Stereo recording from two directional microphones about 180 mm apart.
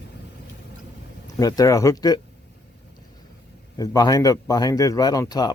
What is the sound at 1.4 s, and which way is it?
Speech, 20° left (ahead or behind).